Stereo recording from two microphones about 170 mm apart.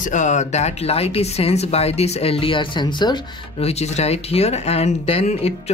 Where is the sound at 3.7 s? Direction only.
40° left (ahead or behind).